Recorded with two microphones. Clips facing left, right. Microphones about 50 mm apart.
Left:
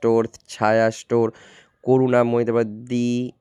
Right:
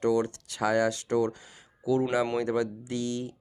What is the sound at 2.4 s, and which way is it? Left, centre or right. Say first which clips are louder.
Speech: left 8 dB; left.